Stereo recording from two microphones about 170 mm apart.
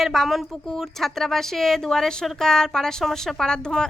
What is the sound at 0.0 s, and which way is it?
A woman's voice, centre (ahead or behind).